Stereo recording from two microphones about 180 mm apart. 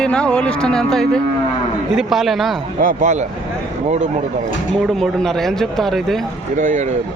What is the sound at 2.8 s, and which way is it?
Speech, 40° right (ahead or behind).